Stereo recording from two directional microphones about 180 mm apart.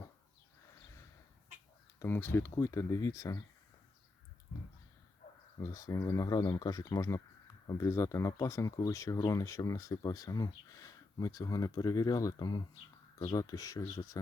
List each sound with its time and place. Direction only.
2.0 s speech: 10° left (ahead or behind)
5.5 s speech: 20° left (ahead or behind)